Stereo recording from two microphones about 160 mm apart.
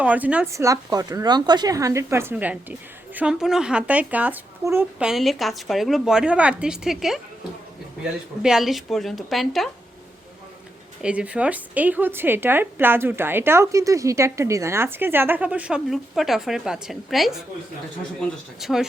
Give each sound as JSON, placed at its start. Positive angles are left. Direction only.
{"t": 0.0, "sound": "a woman's voice", "side_deg": -10}
{"t": 0.5, "sound": "a woman's voice", "side_deg": -20}
{"t": 8.4, "sound": "speech", "side_deg": -5}
{"t": 11.0, "sound": "a woman's voice", "side_deg": -5}
{"t": 18.6, "sound": "speech", "side_deg": 0}